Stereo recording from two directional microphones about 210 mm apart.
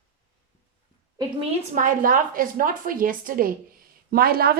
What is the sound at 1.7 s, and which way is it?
A woman's voice, 40° right (ahead or behind).